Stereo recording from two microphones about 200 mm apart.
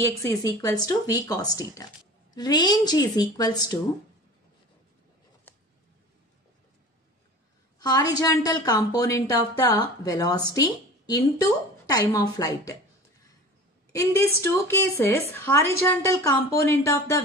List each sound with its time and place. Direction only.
0.2 s a woman's voice: 15° left (ahead or behind)
7.8 s a woman's voice: 20° left (ahead or behind)
13.9 s a woman's voice: 15° left (ahead or behind)